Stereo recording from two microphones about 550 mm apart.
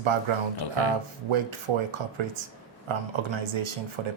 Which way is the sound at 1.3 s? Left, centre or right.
Right.